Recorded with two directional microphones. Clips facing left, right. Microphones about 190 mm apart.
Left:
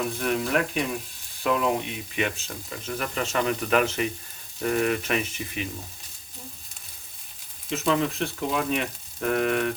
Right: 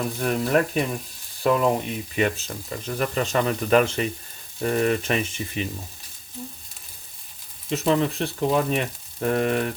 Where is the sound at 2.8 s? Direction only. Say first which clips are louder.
Right 4 dB; 35° right (ahead or behind).